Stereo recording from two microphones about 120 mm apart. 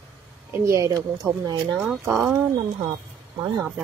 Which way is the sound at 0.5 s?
25° right (ahead or behind).